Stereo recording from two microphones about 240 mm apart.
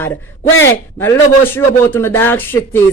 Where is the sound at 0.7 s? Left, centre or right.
Centre.